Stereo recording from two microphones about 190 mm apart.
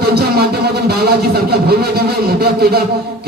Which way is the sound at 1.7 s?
55° right (ahead or behind).